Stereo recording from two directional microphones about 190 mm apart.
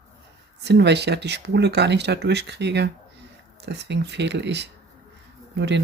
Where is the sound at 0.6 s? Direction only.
65° right (ahead or behind).